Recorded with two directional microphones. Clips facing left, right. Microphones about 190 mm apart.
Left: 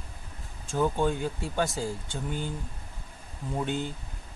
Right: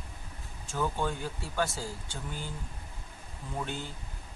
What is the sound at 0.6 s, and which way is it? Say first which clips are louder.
Speech: left 6 dB; 15° left (ahead or behind).